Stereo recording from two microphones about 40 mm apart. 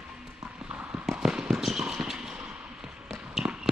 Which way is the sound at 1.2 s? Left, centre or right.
Centre.